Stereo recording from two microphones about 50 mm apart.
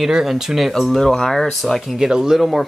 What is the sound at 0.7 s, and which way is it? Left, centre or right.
Speech, centre.